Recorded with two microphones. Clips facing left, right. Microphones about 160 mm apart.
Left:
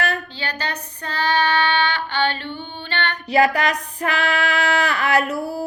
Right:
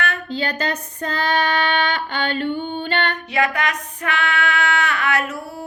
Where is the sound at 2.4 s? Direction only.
45° right (ahead or behind).